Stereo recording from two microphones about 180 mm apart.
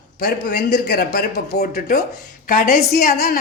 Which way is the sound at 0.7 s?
65° left (ahead or behind).